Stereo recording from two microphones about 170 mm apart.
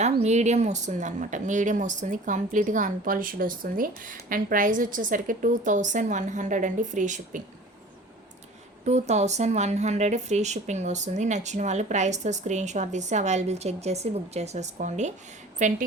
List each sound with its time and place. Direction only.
0.0 s speech: 40° right (ahead or behind)
8.8 s speech: 40° right (ahead or behind)